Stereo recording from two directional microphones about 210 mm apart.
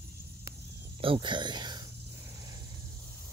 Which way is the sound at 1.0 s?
25° right (ahead or behind).